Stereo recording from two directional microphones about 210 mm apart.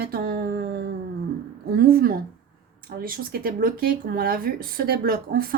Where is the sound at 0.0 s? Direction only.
45° right (ahead or behind).